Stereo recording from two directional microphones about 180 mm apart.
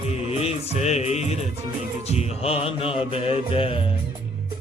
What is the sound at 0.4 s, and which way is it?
Music, 40° left (ahead or behind).